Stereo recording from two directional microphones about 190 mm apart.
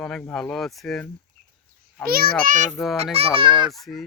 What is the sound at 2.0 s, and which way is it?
Speech, 50° right (ahead or behind).